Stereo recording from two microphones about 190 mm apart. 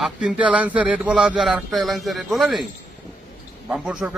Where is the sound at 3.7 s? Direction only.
5° right (ahead or behind).